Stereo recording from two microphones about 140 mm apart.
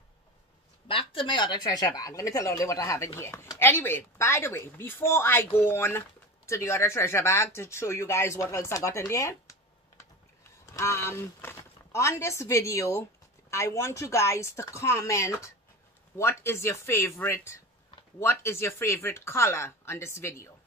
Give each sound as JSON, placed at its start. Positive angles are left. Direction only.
{"t": 0.8, "sound": "speech", "side_deg": 40}
{"t": 10.6, "sound": "speech", "side_deg": 20}